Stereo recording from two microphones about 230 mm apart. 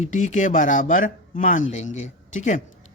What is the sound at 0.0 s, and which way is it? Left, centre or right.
A man's voice, left.